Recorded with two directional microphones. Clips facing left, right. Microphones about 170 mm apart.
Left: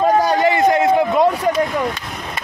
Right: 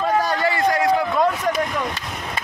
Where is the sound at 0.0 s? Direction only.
35° left (ahead or behind).